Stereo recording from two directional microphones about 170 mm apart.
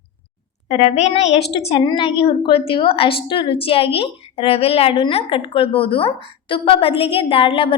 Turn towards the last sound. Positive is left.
turn(degrees=35)  # may be behind; listen again after turning